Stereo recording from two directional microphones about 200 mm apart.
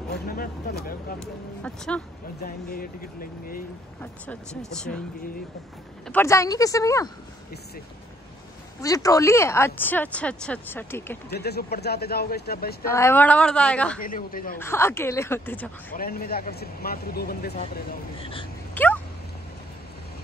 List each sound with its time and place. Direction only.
0.3 s speech: 45° left (ahead or behind)
1.6 s speech: 5° left (ahead or behind)
2.4 s speech: 45° left (ahead or behind)
4.0 s speech: 5° left (ahead or behind)
6.0 s speech: 10° left (ahead or behind)
8.8 s speech: 15° left (ahead or behind)
11.3 s speech: 55° left (ahead or behind)
12.8 s speech: 15° left (ahead or behind)
14.0 s speech: 45° left (ahead or behind)
14.6 s speech: 10° left (ahead or behind)
15.9 s speech: 45° left (ahead or behind)
18.2 s speech: 25° left (ahead or behind)
18.8 s a sound: 10° left (ahead or behind)